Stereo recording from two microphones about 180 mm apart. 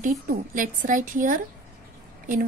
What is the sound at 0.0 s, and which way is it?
Speech, 45° right (ahead or behind).